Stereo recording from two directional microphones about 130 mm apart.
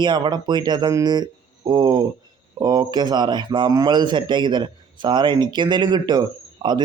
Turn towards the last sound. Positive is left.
turn(degrees=-35)  # may be behind; listen again after turning